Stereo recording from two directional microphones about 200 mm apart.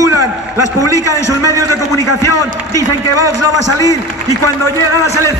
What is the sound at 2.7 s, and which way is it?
Speech, 15° right (ahead or behind).